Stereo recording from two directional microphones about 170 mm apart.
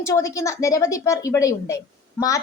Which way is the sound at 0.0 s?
20° left (ahead or behind).